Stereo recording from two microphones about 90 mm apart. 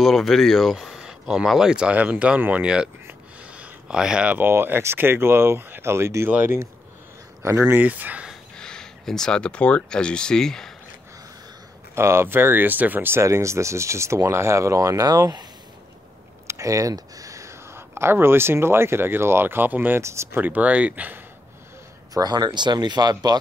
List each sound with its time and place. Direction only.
0.0 s speech: centre (ahead or behind)
3.1 s a sound: 15° right (ahead or behind)
4.5 s speech: 25° right (ahead or behind)
8.5 s speech: 10° left (ahead or behind)
11.9 s speech: 30° right (ahead or behind)
16.4 s speech: 35° right (ahead or behind)
20.0 s speech: 30° right (ahead or behind)
20.3 s speech: 20° right (ahead or behind)
22.1 s speech: 50° right (ahead or behind)